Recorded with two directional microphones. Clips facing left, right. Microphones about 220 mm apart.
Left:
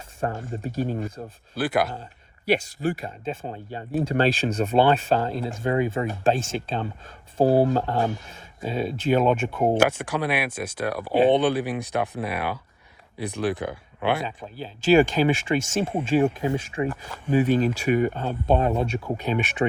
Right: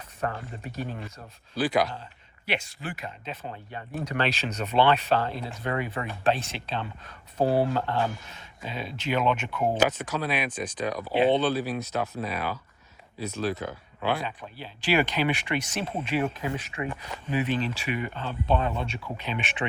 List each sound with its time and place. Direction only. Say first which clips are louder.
0.3 s speech: left 7 dB; 45° left (ahead or behind)
0.6 s speech: left 9 dB; 30° left (ahead or behind)
1.5 s speech: left 1 dB; 5° left (ahead or behind)
2.5 s speech: left 10 dB; 40° left (ahead or behind)
4.6 s speech: left 3 dB; 45° left (ahead or behind)
5.6 s speech: left 7 dB; 30° left (ahead or behind)
6.3 s speech: left 6 dB; 45° left (ahead or behind)
6.8 s speech: left 6 dB; 30° left (ahead or behind)
7.6 s speech: left 4 dB; 40° left (ahead or behind)
9.7 s speech: left 4 dB; 10° left (ahead or behind)
14.3 s speech: left 4 dB; 35° left (ahead or behind)
16.4 s speech: left 6 dB; 25° left (ahead or behind)
17.2 s speech: left 7 dB; 45° left (ahead or behind)